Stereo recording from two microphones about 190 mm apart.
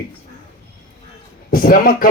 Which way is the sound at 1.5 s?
50° left (ahead or behind).